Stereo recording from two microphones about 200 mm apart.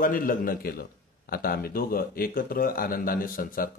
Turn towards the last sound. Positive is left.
turn(degrees=45)  # may be behind; listen again after turning